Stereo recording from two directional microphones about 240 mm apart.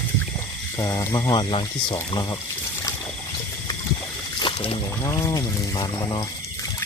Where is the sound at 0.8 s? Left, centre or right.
Centre.